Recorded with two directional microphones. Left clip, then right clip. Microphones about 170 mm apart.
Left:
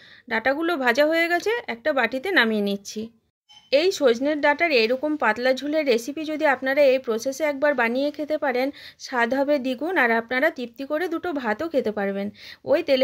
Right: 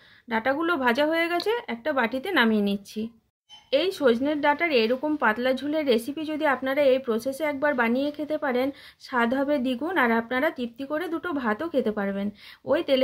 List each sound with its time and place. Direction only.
0.3 s speech: 40° left (ahead or behind)